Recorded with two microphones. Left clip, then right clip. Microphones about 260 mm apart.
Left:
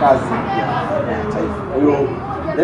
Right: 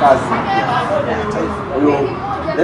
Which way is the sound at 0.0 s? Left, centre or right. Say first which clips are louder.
Right 2 dB; centre.